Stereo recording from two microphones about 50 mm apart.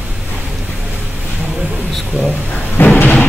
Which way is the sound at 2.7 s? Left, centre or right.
Left.